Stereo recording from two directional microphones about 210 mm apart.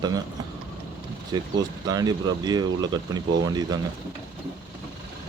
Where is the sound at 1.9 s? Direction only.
20° right (ahead or behind).